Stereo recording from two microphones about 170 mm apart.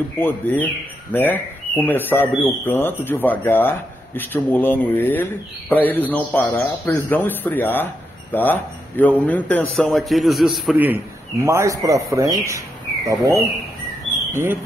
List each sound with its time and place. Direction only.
0.2 s speech: 10° left (ahead or behind); by 11.0 s 10° right (ahead or behind)
11.4 s speech: 20° right (ahead or behind)